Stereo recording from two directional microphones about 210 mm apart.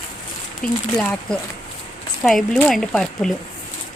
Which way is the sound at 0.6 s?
5° left (ahead or behind).